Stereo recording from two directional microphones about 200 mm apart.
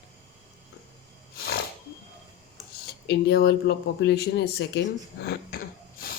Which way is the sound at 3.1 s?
50° left (ahead or behind).